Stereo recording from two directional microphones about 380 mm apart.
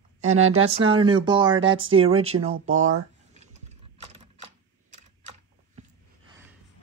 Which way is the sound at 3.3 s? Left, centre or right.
Centre.